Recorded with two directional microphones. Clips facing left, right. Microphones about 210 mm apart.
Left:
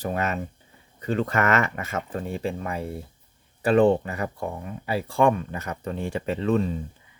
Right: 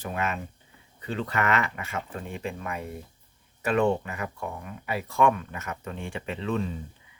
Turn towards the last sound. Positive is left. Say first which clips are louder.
# left 6 dB
turn(degrees=40)  # may be behind; listen again after turning